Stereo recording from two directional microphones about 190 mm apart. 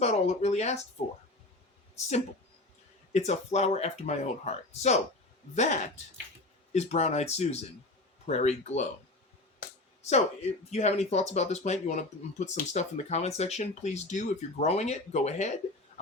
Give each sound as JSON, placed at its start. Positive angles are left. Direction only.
{"t": 0.0, "sound": "speech", "side_deg": 35}
{"t": 3.1, "sound": "speech", "side_deg": 35}
{"t": 10.0, "sound": "speech", "side_deg": 35}